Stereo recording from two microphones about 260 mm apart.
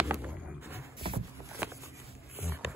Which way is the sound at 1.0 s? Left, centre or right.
Right.